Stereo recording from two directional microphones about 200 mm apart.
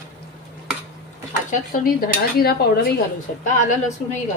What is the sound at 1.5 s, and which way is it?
Dishes, 45° left (ahead or behind).